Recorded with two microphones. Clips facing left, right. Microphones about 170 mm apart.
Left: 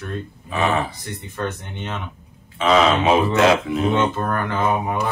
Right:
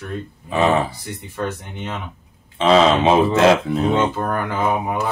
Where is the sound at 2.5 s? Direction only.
30° right (ahead or behind).